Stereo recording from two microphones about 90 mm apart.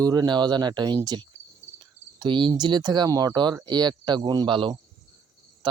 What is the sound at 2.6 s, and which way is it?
Speech, 55° right (ahead or behind).